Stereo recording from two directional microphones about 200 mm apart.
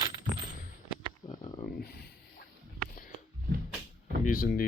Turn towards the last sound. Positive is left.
turn(degrees=45)  # may be behind; listen again after turning